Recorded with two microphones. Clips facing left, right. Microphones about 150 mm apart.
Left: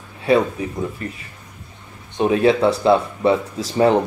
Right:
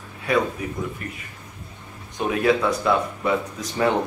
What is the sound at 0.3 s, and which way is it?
Speech, 30° left (ahead or behind).